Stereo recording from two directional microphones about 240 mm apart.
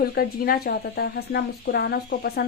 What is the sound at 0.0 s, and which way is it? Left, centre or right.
A woman's voice, left.